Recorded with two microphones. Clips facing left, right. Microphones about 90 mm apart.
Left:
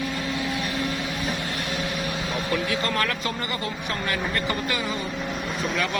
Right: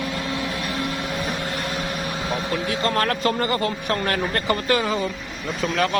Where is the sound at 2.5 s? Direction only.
40° right (ahead or behind); by 4.9 s 55° right (ahead or behind).